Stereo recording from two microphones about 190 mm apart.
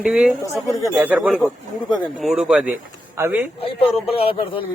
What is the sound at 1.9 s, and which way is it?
Speech, 20° left (ahead or behind).